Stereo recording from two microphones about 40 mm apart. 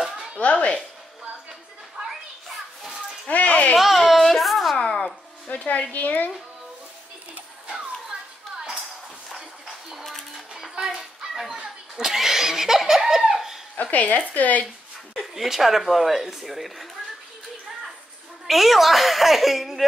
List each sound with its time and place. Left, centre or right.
0.0 s a sound: centre
0.4 s cat: left
2.0 s children playing: right
3.3 s a sound: left
3.7 s baby cry: centre
4.4 s a sound: centre
4.7 s a sound: left
5.5 s speech: left
10.7 s children playing: centre
12.0 s laughter: centre
13.7 s a woman's voice: left
15.3 s a man's voice: centre
18.5 s a man's voice: centre